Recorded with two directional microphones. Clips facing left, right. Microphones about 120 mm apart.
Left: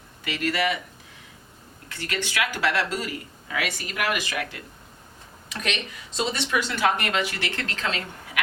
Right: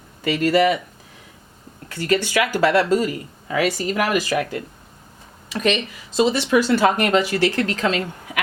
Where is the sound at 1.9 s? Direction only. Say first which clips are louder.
Right 9 dB; 40° right (ahead or behind).